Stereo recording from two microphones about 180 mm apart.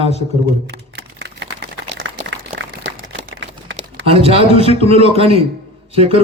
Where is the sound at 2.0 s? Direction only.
90° right.